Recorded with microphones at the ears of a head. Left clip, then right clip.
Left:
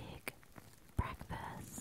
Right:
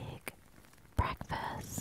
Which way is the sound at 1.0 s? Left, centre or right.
Right.